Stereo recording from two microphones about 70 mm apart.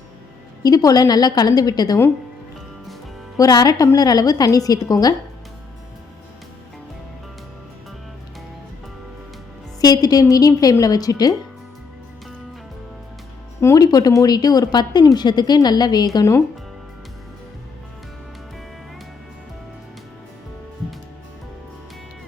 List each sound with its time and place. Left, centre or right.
0.6 s a woman's voice: left
3.3 s a woman's voice: left
9.8 s a woman's voice: left
13.7 s a woman's voice: left